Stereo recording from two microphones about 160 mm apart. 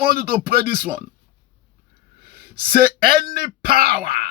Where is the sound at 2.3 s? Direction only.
70° right (ahead or behind).